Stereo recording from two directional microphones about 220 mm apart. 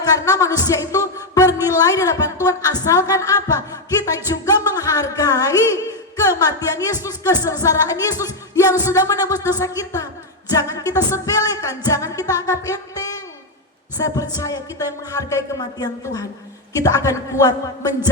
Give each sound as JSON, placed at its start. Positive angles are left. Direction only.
{"t": 0.0, "sound": "speech", "side_deg": 15}
{"t": 4.4, "sound": "a sound", "side_deg": 15}
{"t": 7.4, "sound": "music", "side_deg": 15}